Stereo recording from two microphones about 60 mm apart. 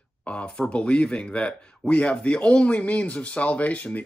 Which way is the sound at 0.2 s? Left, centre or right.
Centre.